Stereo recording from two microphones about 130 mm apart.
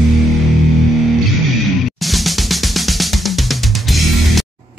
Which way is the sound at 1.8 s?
Centre (ahead or behind).